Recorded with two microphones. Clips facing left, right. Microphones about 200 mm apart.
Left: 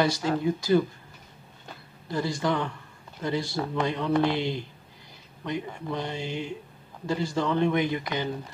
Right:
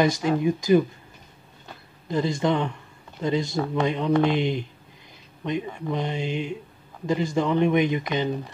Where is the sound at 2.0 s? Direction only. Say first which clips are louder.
Right 4 dB; 20° right (ahead or behind).